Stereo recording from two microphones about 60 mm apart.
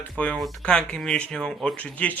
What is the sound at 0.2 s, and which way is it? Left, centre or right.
Speech, left.